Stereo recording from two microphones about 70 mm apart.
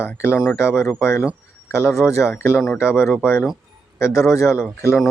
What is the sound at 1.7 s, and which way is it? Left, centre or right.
Speech, left.